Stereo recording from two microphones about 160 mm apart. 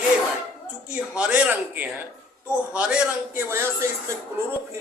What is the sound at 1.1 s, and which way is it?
A man's voice, 5° right (ahead or behind).